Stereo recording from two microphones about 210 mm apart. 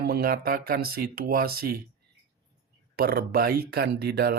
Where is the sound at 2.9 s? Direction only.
50° right (ahead or behind).